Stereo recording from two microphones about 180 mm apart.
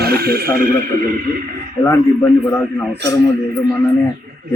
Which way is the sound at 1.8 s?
15° left (ahead or behind).